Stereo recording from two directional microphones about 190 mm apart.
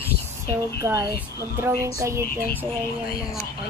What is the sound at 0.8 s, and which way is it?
A woman's voice, 15° right (ahead or behind).